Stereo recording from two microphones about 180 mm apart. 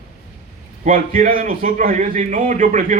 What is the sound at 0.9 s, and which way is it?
A man's voice, 50° right (ahead or behind).